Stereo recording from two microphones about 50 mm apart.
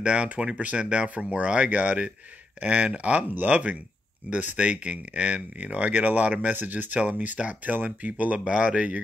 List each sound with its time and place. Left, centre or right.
0.0 s speech: right
8.5 s speech: right